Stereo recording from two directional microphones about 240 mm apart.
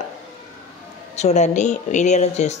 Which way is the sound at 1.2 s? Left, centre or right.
Left.